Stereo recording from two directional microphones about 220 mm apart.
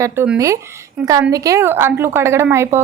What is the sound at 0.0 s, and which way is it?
A woman's voice, 10° right (ahead or behind).